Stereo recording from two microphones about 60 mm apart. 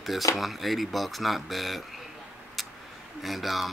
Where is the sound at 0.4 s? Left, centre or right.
Centre.